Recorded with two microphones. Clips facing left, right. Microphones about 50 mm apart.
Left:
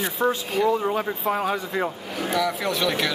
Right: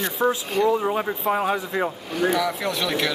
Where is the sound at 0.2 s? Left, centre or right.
Centre.